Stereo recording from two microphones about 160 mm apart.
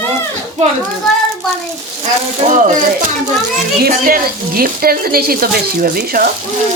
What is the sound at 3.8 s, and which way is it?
Speech, 65° right (ahead or behind).